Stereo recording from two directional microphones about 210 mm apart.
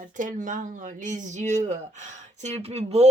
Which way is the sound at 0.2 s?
40° right (ahead or behind).